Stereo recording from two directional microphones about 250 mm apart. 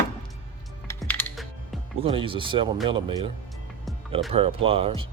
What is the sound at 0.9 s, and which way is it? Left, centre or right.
Typing, centre.